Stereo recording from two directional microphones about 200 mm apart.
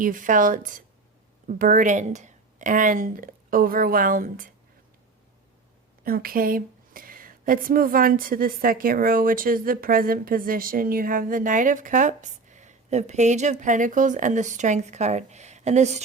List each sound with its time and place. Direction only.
0.0 s a woman's voice: 40° right (ahead or behind)
6.1 s speech: 45° right (ahead or behind)